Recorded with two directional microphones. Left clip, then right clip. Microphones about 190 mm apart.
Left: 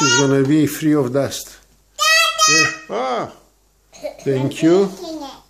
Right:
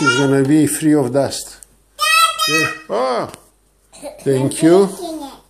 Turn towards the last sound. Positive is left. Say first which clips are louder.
# right 3 dB
turn(degrees=-5)  # may be behind; listen again after turning